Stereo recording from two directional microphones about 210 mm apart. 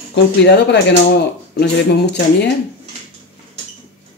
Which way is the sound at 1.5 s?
55° left (ahead or behind).